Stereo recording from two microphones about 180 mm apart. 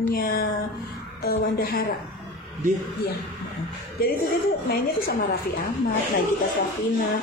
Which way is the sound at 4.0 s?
55° left (ahead or behind).